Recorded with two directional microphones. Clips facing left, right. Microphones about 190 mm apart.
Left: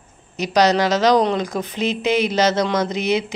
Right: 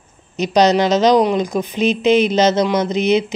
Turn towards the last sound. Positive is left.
turn(degrees=-20)  # may be behind; listen again after turning